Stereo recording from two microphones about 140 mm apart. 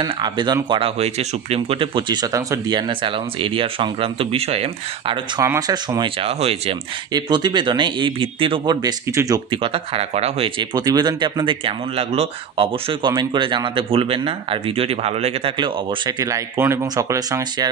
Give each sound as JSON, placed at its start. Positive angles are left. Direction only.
{"t": 0.0, "sound": "speech", "side_deg": -30}
{"t": 0.7, "sound": "speech", "side_deg": -40}
{"t": 2.9, "sound": "speech", "side_deg": -40}
{"t": 5.4, "sound": "speech", "side_deg": -20}
{"t": 6.0, "sound": "speech", "side_deg": -40}
{"t": 7.1, "sound": "speech", "side_deg": -30}
{"t": 9.5, "sound": "speech", "side_deg": -40}
{"t": 10.6, "sound": "speech", "side_deg": -30}
{"t": 15.5, "sound": "speech", "side_deg": -35}